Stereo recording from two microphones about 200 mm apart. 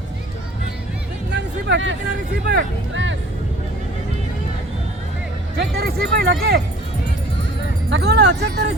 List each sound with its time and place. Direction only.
1.3 s music: 60° right (ahead or behind)
5.5 s music: 50° right (ahead or behind)
7.9 s music: 55° right (ahead or behind)